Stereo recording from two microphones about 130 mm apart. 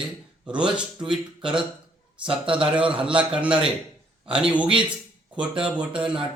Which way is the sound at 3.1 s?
10° right (ahead or behind).